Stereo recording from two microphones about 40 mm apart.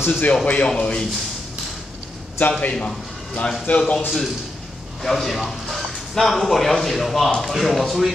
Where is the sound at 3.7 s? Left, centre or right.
Left.